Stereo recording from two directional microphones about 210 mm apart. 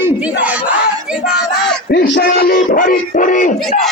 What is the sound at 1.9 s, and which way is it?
Music, 45° left (ahead or behind).